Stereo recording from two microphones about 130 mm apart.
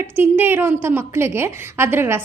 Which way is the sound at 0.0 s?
15° right (ahead or behind).